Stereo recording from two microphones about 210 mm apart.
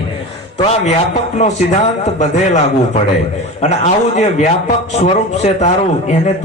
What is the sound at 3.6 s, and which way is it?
A man's voice, 35° left (ahead or behind).